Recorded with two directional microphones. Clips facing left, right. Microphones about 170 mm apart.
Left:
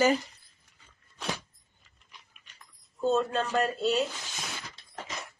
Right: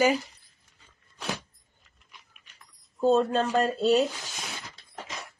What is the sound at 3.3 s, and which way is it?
Speech, 35° right (ahead or behind).